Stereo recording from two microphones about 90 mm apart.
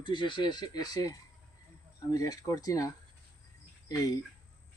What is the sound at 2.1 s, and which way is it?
Speech, 40° left (ahead or behind).